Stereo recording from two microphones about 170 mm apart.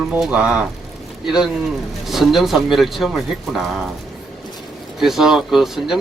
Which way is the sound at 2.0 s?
Centre (ahead or behind).